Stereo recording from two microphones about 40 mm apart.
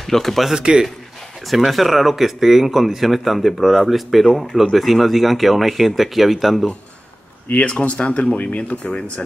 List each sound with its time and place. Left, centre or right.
0.0 s speech: centre
0.6 s a man's voice: right
1.5 s speech: centre
7.4 s speech: left
7.7 s speech: left